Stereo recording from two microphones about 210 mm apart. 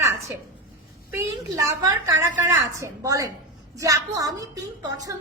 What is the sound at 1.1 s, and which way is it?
A woman's voice, 15° right (ahead or behind).